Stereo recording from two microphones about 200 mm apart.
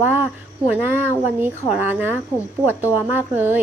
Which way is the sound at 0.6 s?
10° right (ahead or behind).